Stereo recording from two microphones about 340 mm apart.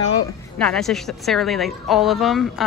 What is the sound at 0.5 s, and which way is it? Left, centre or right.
A woman's voice, centre.